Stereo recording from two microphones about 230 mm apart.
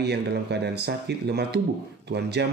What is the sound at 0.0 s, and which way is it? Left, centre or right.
Speech, right.